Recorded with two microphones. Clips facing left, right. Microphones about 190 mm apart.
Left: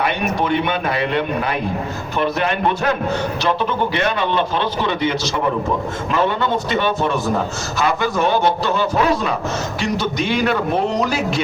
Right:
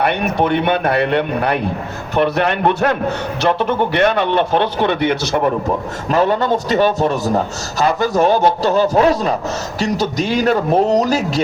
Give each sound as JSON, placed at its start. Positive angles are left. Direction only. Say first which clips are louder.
{"t": 0.0, "sound": "a man's voice", "louder": "right 3 dB", "side_deg": -60}
{"t": 6.1, "sound": "a man's voice", "louder": "right 4 dB", "side_deg": -40}